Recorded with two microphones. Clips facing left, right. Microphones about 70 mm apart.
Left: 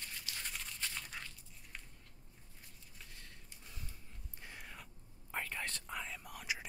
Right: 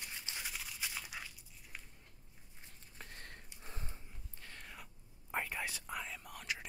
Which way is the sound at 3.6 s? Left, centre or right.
Right.